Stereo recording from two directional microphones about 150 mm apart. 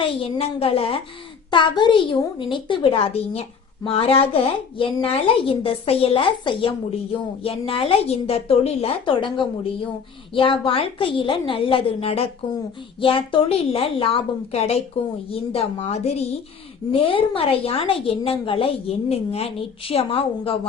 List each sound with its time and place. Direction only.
0.0 s a woman's voice: 40° left (ahead or behind)